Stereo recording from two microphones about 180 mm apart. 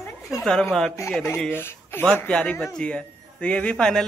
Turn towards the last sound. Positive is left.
turn(degrees=5)  # may be behind; listen again after turning